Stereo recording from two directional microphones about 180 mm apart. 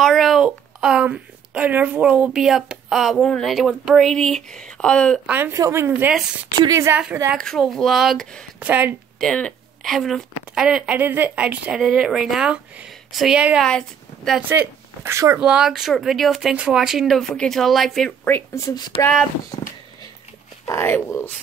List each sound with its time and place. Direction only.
0.0 s a woman's voice: centre (ahead or behind)
5.3 s a woman's voice: 15° right (ahead or behind)
7.3 s a woman's voice: centre (ahead or behind)
8.6 s a woman's voice: 10° right (ahead or behind)
9.2 s a woman's voice: 5° left (ahead or behind)
14.5 s speech: 15° right (ahead or behind)
15.4 s a woman's voice: 5° right (ahead or behind); by 18.9 s 15° left (ahead or behind)
18.9 s speech: 5° left (ahead or behind)
20.6 s speech: 15° left (ahead or behind)